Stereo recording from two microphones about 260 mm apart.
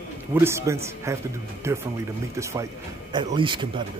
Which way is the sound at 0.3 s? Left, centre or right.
Centre.